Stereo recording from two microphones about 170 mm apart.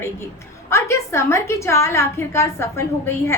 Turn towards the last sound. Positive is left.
turn(degrees=15)  # may be behind; listen again after turning